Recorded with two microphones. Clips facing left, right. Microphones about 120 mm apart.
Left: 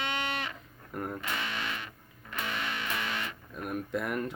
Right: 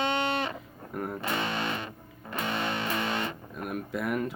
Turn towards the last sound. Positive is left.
turn(degrees=0)  # may be behind; listen again after turning